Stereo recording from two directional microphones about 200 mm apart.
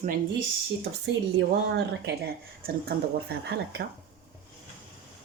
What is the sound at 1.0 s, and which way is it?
A woman's voice, 55° right (ahead or behind).